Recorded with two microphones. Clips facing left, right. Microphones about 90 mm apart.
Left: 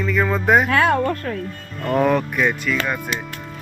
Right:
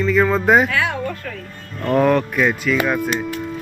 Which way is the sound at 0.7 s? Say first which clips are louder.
Left 5 dB; 45° left (ahead or behind).